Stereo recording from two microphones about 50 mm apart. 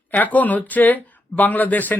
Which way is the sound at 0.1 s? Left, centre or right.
Left.